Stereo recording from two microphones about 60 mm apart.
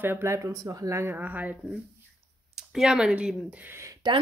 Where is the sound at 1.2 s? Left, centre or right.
Right.